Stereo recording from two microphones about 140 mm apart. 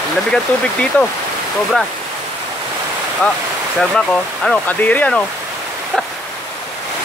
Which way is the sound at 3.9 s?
5° left (ahead or behind).